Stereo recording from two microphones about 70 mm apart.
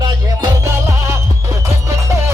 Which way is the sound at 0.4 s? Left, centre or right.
Right.